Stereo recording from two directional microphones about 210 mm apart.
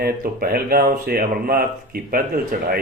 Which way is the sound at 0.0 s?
45° right (ahead or behind).